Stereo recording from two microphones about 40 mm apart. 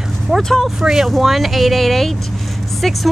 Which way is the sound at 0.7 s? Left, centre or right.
Centre.